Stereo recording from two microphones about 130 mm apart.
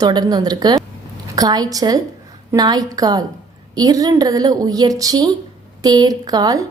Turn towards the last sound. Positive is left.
turn(degrees=-30)  # may be behind; listen again after turning